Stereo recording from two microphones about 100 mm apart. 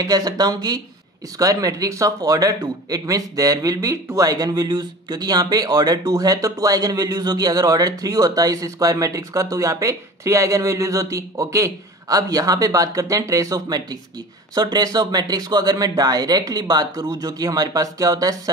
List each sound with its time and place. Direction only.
0.0 s speech: 40° right (ahead or behind)